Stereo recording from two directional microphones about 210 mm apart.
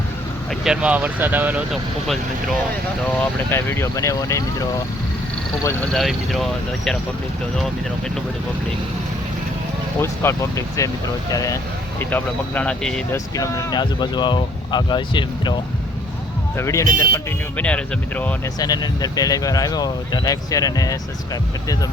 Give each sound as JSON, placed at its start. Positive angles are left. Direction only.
{"t": 0.6, "sound": "speech", "side_deg": -5}
{"t": 3.5, "sound": "speech", "side_deg": 10}
{"t": 5.9, "sound": "speech", "side_deg": 0}
{"t": 10.0, "sound": "speech", "side_deg": 15}
{"t": 13.1, "sound": "speech", "side_deg": 15}
{"t": 16.6, "sound": "speech", "side_deg": 15}
{"t": 18.6, "sound": "speech", "side_deg": 20}